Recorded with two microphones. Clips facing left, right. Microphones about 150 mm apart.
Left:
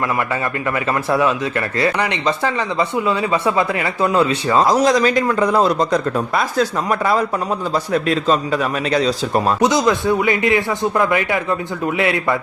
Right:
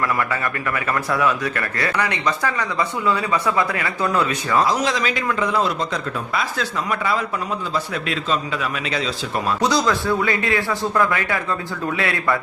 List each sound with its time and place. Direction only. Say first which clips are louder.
1.1 s speech: left 4 dB; 25° left (ahead or behind)
4.6 s a man's voice: left 6 dB; 40° left (ahead or behind)
9.6 s speech: left 1 dB; 20° left (ahead or behind)